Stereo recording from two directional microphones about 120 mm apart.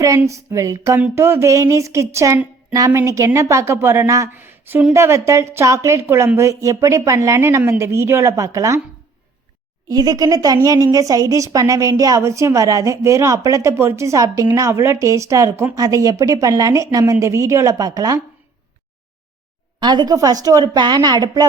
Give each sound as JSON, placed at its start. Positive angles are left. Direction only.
{"t": 0.2, "sound": "speech", "side_deg": -25}
{"t": 4.9, "sound": "speech", "side_deg": -25}
{"t": 9.9, "sound": "speech", "side_deg": -30}
{"t": 19.8, "sound": "speech", "side_deg": -35}